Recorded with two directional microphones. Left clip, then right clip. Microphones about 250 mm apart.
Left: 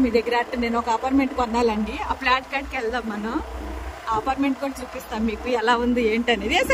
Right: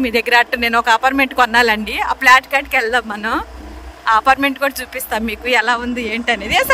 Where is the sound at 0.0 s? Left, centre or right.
Centre.